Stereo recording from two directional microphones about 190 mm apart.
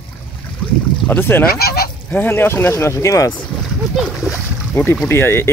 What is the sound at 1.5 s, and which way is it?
Goose, 55° left (ahead or behind).